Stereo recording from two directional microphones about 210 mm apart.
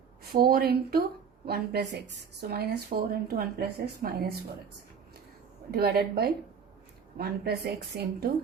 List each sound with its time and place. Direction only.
0.3 s a woman's voice: 45° right (ahead or behind)
5.7 s a woman's voice: 50° right (ahead or behind)